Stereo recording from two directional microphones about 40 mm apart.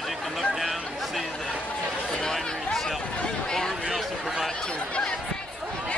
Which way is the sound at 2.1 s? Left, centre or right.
Centre.